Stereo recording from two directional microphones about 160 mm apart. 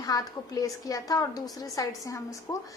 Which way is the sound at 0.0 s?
20° left (ahead or behind).